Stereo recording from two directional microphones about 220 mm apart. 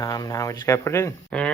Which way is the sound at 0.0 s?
15° left (ahead or behind).